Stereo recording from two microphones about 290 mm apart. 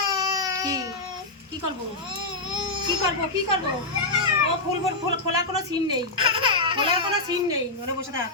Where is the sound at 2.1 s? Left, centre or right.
Centre.